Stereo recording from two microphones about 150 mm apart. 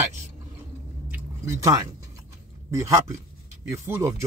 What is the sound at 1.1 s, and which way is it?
Chewing, 20° right (ahead or behind).